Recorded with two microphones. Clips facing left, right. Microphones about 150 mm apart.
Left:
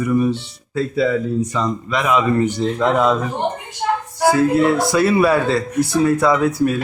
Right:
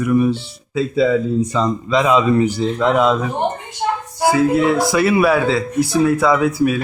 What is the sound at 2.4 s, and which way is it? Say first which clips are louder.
Speech: right 1 dB; 5° right (ahead or behind).